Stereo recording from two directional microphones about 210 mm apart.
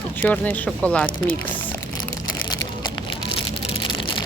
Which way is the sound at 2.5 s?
20° left (ahead or behind).